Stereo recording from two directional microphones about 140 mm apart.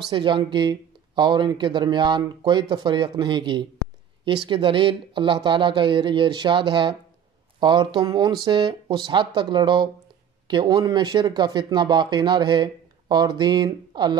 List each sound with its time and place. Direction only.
0.1 s speech: 35° right (ahead or behind)